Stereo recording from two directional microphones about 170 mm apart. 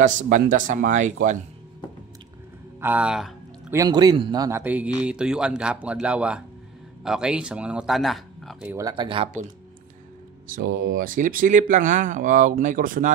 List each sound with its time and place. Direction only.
0.0 s speech: 50° right (ahead or behind)
2.8 s speech: 10° right (ahead or behind)
3.7 s speech: 20° right (ahead or behind)
4.5 s speech: 10° right (ahead or behind)
8.6 s speech: 20° right (ahead or behind)
10.5 s speech: 55° right (ahead or behind)